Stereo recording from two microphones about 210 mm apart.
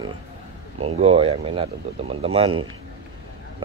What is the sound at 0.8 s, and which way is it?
Speech, 30° right (ahead or behind).